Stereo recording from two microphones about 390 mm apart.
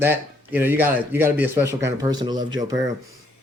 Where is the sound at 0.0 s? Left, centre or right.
Centre.